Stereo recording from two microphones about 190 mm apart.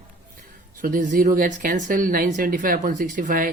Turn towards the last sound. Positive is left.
turn(degrees=-45)  # may be behind; listen again after turning